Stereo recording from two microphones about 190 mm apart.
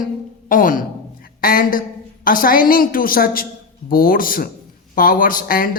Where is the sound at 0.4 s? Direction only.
45° left (ahead or behind).